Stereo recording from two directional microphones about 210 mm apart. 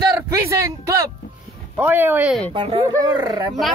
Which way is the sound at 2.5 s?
25° right (ahead or behind).